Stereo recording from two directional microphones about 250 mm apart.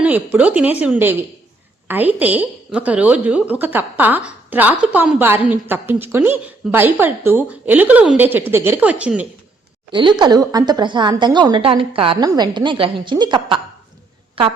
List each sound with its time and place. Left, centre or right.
0.0 s a woman's voice: centre
9.9 s a woman's voice: centre